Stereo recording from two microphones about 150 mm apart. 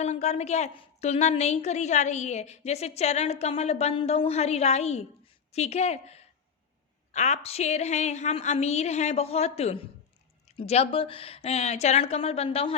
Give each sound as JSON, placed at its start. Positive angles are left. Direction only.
{"t": 0.0, "sound": "a woman's voice", "side_deg": 50}